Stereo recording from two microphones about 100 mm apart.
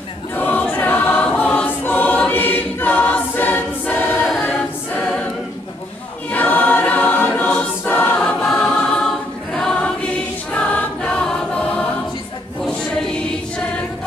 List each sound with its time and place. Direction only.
0.4 s choir: 15° left (ahead or behind)
6.3 s choir: 15° left (ahead or behind)
8.2 s choir: 5° left (ahead or behind)